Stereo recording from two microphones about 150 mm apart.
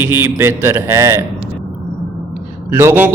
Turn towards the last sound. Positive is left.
turn(degrees=-15)  # may be behind; listen again after turning